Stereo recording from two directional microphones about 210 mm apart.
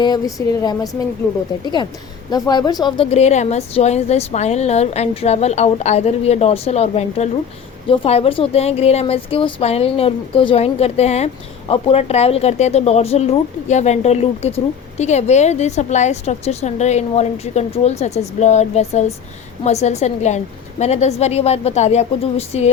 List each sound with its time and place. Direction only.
0.0 s a woman's voice: 15° left (ahead or behind)